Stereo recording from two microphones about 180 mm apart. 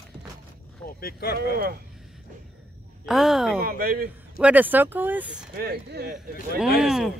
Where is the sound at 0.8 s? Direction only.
55° left (ahead or behind).